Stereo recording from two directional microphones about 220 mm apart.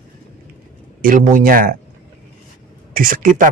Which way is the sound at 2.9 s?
40° right (ahead or behind).